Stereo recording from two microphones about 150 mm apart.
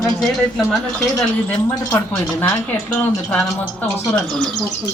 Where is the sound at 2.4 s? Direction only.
15° left (ahead or behind).